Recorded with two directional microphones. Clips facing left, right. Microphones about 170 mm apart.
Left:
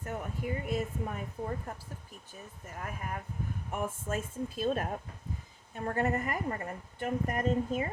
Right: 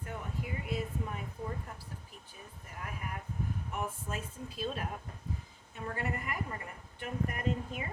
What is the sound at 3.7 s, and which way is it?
Speech, 50° left (ahead or behind).